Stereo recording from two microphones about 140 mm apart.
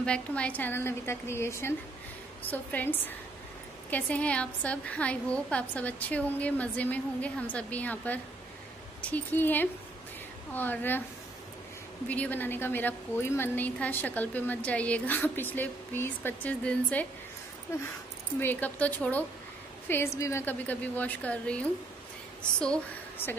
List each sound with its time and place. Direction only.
0.0 s a woman's voice: 10° left (ahead or behind)
12.1 s a woman's voice: 10° left (ahead or behind)
18.4 s a woman's voice: 15° left (ahead or behind)